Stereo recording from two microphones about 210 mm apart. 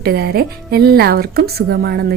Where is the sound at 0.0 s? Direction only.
50° right (ahead or behind).